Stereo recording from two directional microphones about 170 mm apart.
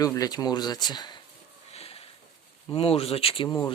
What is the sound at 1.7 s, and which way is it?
Sniff, 35° left (ahead or behind).